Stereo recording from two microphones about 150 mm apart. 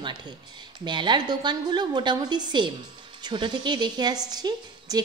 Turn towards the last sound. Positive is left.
turn(degrees=-25)  # may be behind; listen again after turning